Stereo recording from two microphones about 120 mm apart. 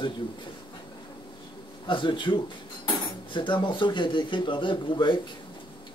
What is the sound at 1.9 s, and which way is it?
A man's voice, 45° left (ahead or behind).